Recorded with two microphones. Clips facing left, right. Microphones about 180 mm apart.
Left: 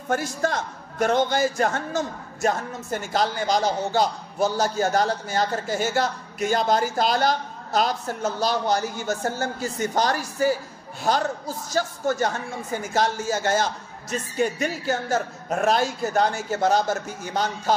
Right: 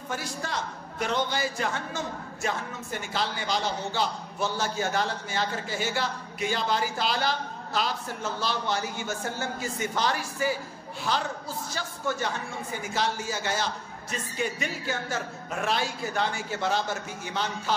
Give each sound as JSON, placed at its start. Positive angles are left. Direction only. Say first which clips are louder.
{"t": 0.1, "sound": "a man's voice", "louder": "left 9 dB", "side_deg": 50}